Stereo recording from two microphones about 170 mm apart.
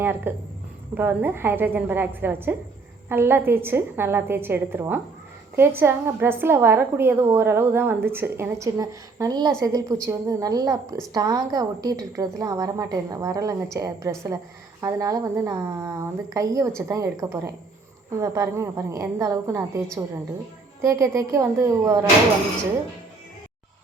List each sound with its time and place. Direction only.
0.0 s a woman's voice: 10° right (ahead or behind)
20.8 s a woman's voice: 15° right (ahead or behind)